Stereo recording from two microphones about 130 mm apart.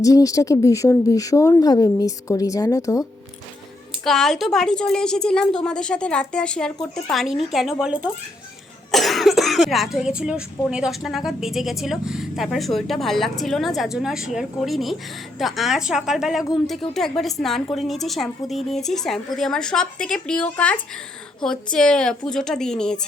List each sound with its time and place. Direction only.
0.0 s speech: 25° left (ahead or behind)
4.0 s speech: 5° left (ahead or behind)